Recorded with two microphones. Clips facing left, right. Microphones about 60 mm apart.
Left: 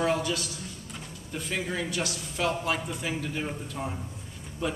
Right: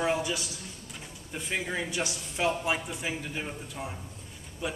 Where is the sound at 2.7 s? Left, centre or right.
Centre.